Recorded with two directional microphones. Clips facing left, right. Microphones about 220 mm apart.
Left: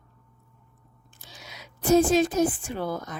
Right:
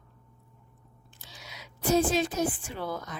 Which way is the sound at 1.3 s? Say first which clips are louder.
Left 2 dB; 50° left (ahead or behind).